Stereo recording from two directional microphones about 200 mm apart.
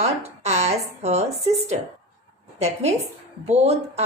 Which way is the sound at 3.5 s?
30° right (ahead or behind).